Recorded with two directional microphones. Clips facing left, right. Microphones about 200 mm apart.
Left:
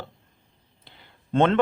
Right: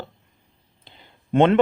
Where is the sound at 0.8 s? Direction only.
20° right (ahead or behind).